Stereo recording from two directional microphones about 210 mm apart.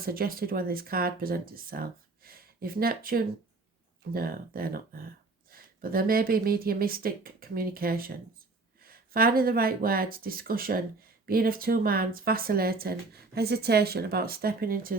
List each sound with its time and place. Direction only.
0.0 s speech: 45° right (ahead or behind)